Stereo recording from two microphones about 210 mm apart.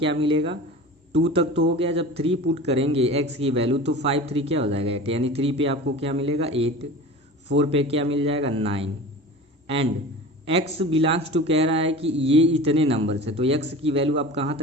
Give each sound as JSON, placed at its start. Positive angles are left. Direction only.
{"t": 0.0, "sound": "a man's voice", "side_deg": -25}